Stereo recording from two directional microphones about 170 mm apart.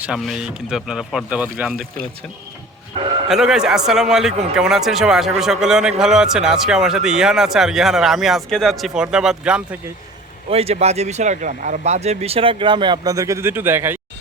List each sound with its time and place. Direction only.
0.0 s speech: 5° right (ahead or behind)
3.2 s speech: 5° right (ahead or behind)
10.5 s speech: 35° right (ahead or behind); by 14.0 s 15° right (ahead or behind)